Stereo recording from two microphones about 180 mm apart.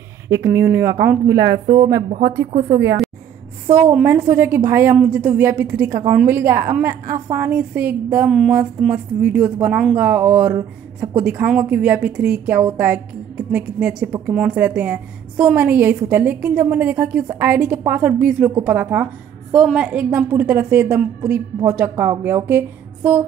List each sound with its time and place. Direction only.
0.5 s a woman's voice: 15° right (ahead or behind)
2.7 s a woman's voice: 70° right (ahead or behind)
3.6 s a woman's voice: 10° right (ahead or behind)